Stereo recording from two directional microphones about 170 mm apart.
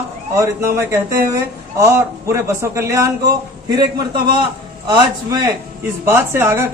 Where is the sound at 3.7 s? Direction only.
25° right (ahead or behind).